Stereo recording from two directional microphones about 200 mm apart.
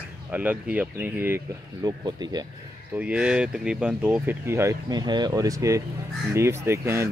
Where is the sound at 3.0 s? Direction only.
5° right (ahead or behind).